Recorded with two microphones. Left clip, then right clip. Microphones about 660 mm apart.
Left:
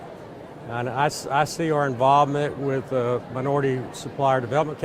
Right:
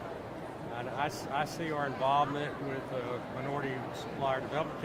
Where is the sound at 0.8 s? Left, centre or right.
Left.